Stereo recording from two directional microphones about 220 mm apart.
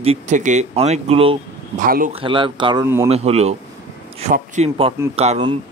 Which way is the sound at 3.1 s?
30° right (ahead or behind).